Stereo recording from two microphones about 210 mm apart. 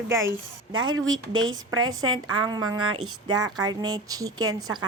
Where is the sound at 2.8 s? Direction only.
90° right.